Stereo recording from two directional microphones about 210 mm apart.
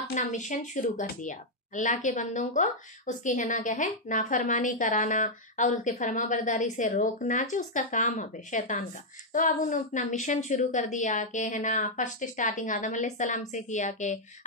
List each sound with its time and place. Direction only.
0.1 s a woman's voice: 35° left (ahead or behind)